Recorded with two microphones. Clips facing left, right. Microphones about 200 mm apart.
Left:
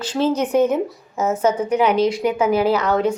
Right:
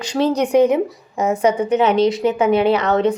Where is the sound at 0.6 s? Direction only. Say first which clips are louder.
Right 4 dB; 10° right (ahead or behind).